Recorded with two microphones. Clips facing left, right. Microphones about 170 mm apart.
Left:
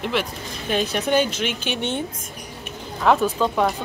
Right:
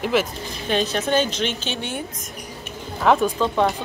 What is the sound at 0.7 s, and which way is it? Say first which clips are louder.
Speech: even; 10° left (ahead or behind).